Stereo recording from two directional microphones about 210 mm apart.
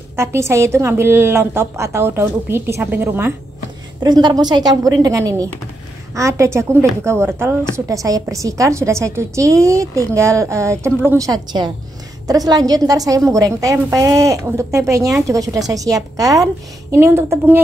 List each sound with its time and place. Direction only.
0.1 s a woman's voice: 10° right (ahead or behind)